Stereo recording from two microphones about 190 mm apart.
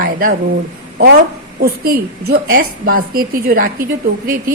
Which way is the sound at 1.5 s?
50° right (ahead or behind).